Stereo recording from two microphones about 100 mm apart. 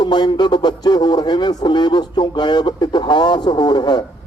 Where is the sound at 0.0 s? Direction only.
45° left (ahead or behind).